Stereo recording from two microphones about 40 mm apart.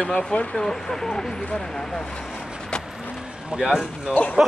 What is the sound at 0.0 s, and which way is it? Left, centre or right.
Speech, left.